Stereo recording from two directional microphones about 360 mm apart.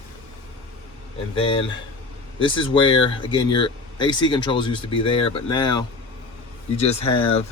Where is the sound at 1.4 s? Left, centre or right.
Centre.